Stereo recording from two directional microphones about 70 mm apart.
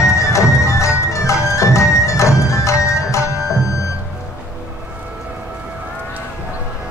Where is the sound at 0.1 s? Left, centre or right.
Left.